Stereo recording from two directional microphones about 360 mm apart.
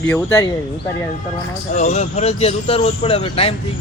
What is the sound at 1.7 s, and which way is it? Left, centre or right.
Speech, centre.